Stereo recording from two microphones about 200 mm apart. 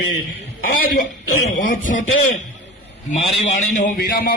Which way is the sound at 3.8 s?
45° left (ahead or behind).